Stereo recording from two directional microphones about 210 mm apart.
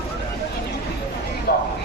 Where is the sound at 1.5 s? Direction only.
45° left (ahead or behind).